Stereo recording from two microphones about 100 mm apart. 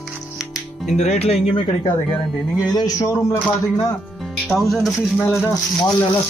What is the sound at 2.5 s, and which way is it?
Speech, 40° left (ahead or behind).